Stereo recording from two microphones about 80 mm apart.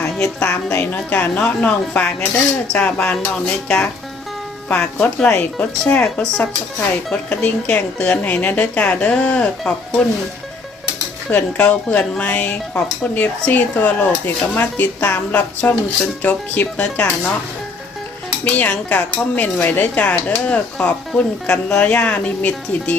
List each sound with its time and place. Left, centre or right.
0.4 s speech: left
11.5 s speech: centre
18.4 s speech: left